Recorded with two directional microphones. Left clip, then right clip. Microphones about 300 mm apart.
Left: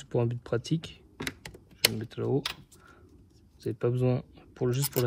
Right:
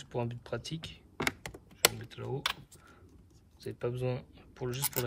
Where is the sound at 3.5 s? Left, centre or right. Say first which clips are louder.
Left 7 dB; centre.